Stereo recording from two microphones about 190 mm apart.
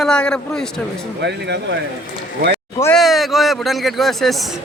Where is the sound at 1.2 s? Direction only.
65° right (ahead or behind).